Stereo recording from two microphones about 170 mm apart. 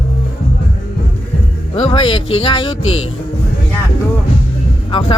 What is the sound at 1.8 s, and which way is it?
Speech, 30° left (ahead or behind).